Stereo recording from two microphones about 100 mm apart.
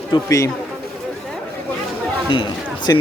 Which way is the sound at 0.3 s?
35° left (ahead or behind).